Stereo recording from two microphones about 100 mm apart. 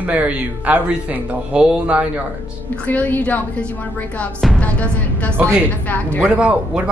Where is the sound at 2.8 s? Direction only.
15° left (ahead or behind).